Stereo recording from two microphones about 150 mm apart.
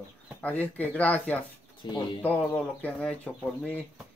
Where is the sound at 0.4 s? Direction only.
10° left (ahead or behind).